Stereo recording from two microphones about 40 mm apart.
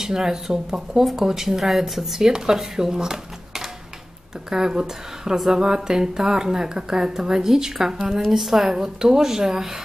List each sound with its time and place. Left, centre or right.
0.0 s speech: centre